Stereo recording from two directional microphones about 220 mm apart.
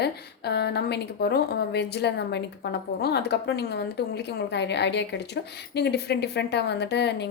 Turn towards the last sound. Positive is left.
turn(degrees=50)  # may be behind; listen again after turning